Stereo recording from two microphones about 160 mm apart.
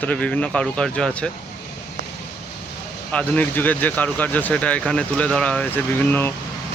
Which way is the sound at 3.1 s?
10° left (ahead or behind).